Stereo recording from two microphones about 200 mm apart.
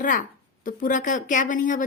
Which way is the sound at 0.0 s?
40° left (ahead or behind).